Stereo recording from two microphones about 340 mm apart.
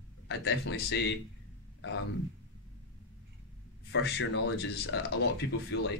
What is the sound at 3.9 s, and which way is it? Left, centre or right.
Speech, left.